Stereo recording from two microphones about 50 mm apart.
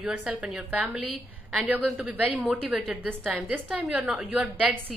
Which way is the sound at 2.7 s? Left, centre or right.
Centre.